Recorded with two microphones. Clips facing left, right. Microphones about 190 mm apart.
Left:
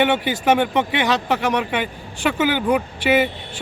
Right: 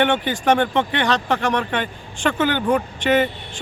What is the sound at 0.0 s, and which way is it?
A man's voice, 10° left (ahead or behind).